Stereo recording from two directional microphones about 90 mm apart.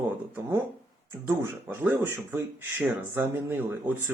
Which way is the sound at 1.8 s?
25° right (ahead or behind).